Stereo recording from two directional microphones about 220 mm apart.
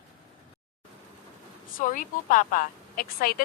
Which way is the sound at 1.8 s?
40° left (ahead or behind).